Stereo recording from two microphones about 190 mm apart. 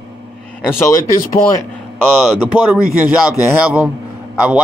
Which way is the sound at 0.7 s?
15° left (ahead or behind).